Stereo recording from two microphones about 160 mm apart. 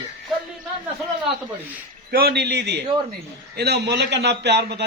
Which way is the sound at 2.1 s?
80° right.